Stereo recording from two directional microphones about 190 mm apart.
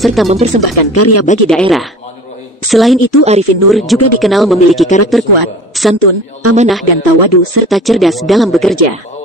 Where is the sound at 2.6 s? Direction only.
Centre (ahead or behind).